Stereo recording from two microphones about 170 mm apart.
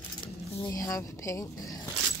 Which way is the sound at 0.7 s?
20° left (ahead or behind).